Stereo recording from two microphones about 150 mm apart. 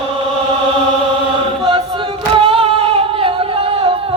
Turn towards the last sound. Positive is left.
turn(degrees=-40)  # may be behind; listen again after turning